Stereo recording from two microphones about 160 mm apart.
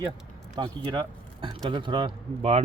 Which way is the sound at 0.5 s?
25° right (ahead or behind).